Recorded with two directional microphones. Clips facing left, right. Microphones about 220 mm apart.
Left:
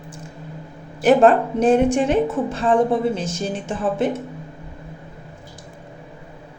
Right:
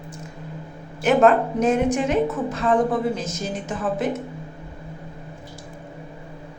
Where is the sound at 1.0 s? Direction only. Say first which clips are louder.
Left 3 dB; 30° left (ahead or behind).